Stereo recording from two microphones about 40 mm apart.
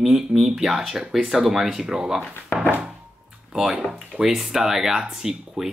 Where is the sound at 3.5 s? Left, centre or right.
Centre.